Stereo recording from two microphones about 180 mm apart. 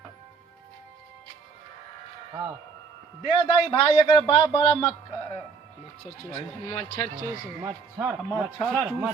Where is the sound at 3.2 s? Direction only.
30° left (ahead or behind).